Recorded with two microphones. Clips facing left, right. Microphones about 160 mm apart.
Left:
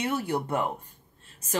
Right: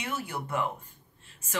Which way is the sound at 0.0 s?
40° left (ahead or behind).